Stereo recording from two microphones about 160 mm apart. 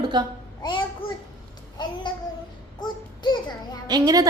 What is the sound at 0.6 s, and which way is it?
Speech, 30° left (ahead or behind).